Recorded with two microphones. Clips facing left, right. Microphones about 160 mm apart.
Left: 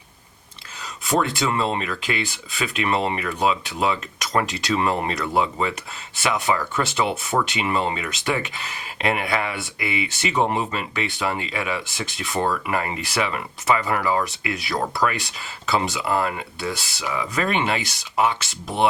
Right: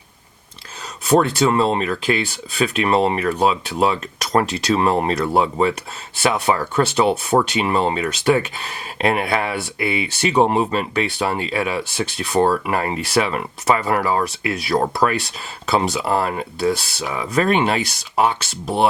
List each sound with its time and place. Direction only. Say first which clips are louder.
1.0 s speech: right 6 dB; 35° right (ahead or behind)